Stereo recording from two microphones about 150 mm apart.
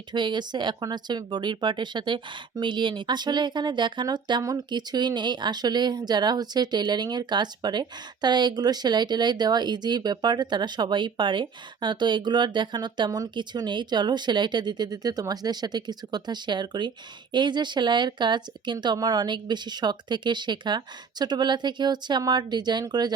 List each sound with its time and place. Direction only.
0.1 s speech: 30° right (ahead or behind)